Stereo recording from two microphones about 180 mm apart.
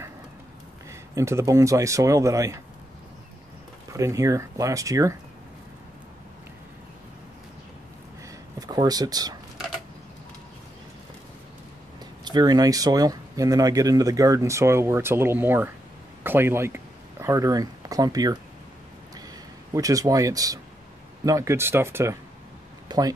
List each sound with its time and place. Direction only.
1.1 s speech: 15° right (ahead or behind)
3.9 s speech: 15° right (ahead or behind)
8.5 s speech: 20° right (ahead or behind)
12.3 s speech: 20° right (ahead or behind)
19.7 s speech: 20° right (ahead or behind)